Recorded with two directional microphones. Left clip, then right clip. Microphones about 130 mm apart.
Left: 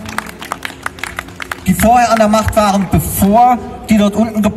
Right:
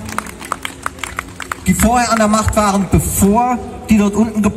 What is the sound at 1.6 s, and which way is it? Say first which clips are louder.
A man's voice: left 5 dB; 50° left (ahead or behind).